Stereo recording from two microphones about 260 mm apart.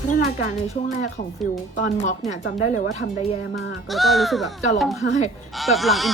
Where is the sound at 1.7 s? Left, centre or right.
Left.